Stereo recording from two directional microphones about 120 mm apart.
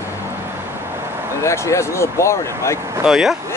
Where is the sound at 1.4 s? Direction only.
25° left (ahead or behind).